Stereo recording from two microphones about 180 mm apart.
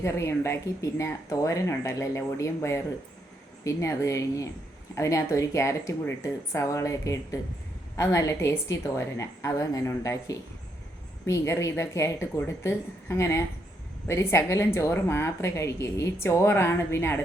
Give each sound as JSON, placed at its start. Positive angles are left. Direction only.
{"t": 0.0, "sound": "speech", "side_deg": 15}